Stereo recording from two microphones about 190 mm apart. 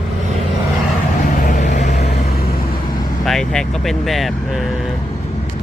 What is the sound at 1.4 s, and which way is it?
Vehicle, 40° left (ahead or behind).